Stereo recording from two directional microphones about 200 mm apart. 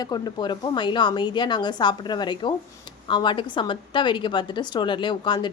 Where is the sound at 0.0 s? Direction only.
20° left (ahead or behind).